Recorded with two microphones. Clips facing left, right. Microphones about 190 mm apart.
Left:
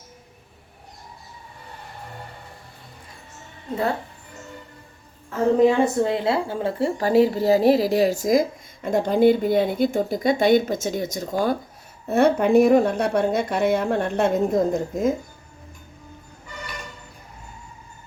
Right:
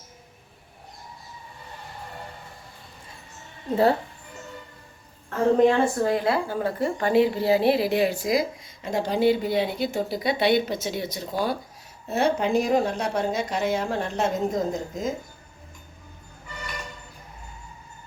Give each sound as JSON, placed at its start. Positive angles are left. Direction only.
{"t": 5.5, "sound": "a woman's voice", "side_deg": 5}
{"t": 5.8, "sound": "a woman's voice", "side_deg": 20}